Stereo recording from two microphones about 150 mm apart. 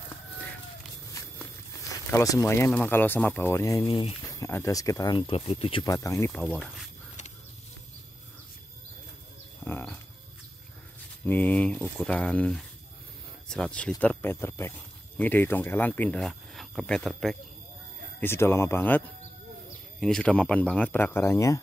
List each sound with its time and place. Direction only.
2.1 s speech: 20° left (ahead or behind)
3.9 s speech: 35° left (ahead or behind)
4.3 s speech: 20° left (ahead or behind); by 5.9 s 40° left (ahead or behind)
5.9 s speech: 20° left (ahead or behind)
6.4 s speech: centre (ahead or behind)
9.7 s a sound: 15° left (ahead or behind)
11.2 s speech: 10° left (ahead or behind)
18.2 s speech: 15° left (ahead or behind)